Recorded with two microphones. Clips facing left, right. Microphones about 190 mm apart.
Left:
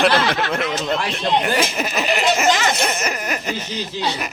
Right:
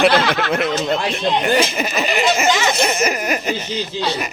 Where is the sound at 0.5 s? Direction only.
5° right (ahead or behind).